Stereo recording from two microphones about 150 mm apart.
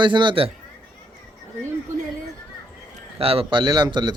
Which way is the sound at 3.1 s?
40° right (ahead or behind).